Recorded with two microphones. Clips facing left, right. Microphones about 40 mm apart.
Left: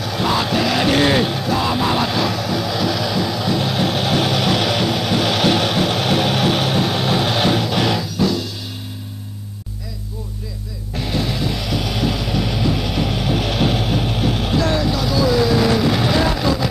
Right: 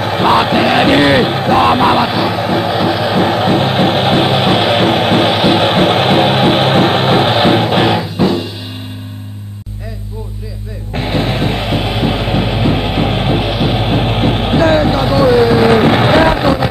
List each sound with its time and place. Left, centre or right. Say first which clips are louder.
0.0 s music: right 8 dB; right
5.3 s music: right 6 dB; right
11.0 s music: right 6 dB; right
13.8 s vehicle: right 6 dB; right